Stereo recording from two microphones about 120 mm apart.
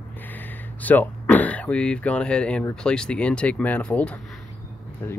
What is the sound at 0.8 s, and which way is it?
Speech, 15° left (ahead or behind).